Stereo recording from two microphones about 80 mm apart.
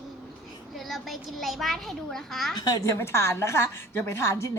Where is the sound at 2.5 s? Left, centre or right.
Left.